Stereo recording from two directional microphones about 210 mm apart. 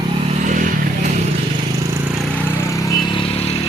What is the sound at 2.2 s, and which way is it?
Vehicle, 10° left (ahead or behind).